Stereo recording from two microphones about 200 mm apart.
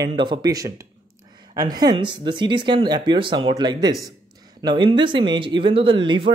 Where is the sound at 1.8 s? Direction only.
20° right (ahead or behind).